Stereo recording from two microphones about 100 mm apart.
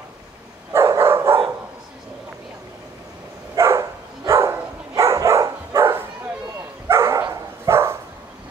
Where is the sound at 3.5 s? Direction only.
30° right (ahead or behind).